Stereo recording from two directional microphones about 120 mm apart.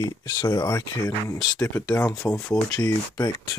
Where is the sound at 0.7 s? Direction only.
25° left (ahead or behind).